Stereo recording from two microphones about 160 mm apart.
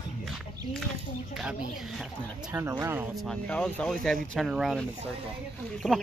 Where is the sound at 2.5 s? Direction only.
15° right (ahead or behind).